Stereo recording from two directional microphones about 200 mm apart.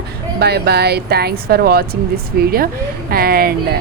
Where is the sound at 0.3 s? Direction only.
55° right (ahead or behind).